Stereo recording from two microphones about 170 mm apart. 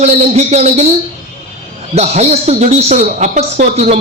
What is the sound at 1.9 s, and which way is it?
A man's voice, 40° right (ahead or behind).